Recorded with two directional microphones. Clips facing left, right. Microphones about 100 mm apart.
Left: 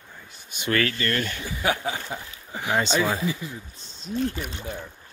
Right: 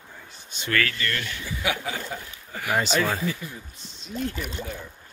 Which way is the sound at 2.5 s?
20° left (ahead or behind).